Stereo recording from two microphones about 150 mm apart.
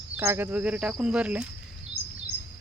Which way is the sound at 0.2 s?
15° right (ahead or behind).